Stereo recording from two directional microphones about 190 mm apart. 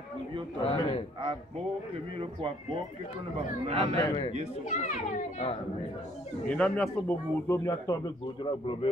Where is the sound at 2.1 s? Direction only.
30° right (ahead or behind).